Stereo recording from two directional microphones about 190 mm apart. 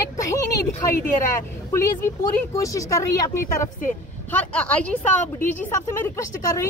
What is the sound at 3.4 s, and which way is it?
Speech, 45° left (ahead or behind).